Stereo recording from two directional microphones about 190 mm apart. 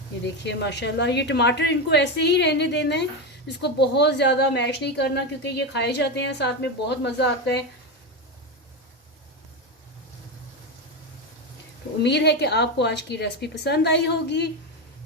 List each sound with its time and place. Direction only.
0.4 s a woman's voice: 65° left (ahead or behind)
12.0 s a woman's voice: 65° left (ahead or behind)